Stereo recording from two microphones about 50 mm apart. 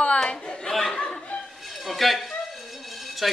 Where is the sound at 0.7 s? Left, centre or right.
Centre.